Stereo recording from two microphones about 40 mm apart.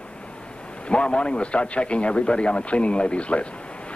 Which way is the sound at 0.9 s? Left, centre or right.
Left.